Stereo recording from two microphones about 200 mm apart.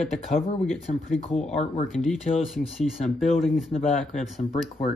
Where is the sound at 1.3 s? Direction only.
30° left (ahead or behind).